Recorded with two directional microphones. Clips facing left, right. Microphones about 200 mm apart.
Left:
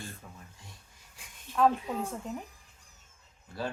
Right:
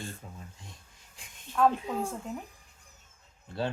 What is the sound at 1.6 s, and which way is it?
Speech, centre (ahead or behind).